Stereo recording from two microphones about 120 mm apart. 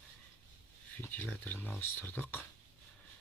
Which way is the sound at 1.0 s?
15° left (ahead or behind).